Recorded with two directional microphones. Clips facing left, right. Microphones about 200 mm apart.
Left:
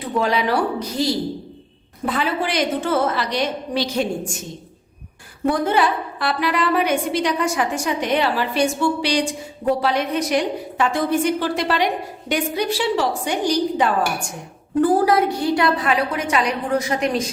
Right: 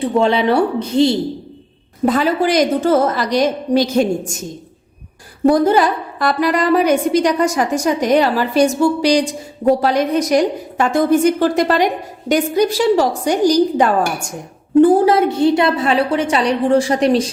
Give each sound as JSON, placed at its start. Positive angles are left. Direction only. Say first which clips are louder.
{"t": 0.0, "sound": "a woman's voice", "louder": "right 6 dB", "side_deg": -25}
{"t": 2.0, "sound": "a woman's voice", "louder": "right 7 dB", "side_deg": -40}
{"t": 5.5, "sound": "a woman's voice", "louder": "right 6 dB", "side_deg": -40}
{"t": 14.8, "sound": "a woman's voice", "louder": "right 6 dB", "side_deg": -25}